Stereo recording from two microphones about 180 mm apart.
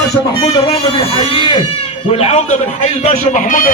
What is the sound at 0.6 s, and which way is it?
Speech, 30° left (ahead or behind).